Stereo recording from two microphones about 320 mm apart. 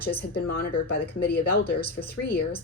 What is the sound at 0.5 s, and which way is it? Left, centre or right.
Speech, left.